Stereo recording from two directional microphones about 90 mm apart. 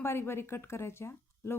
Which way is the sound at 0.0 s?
25° left (ahead or behind).